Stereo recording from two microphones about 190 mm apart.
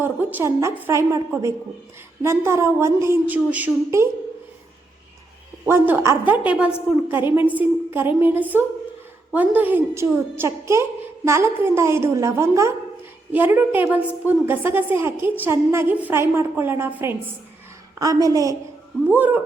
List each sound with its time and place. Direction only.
0.0 s a woman's voice: 10° right (ahead or behind)
5.6 s a woman's voice: 10° right (ahead or behind)
18.0 s a woman's voice: 20° right (ahead or behind)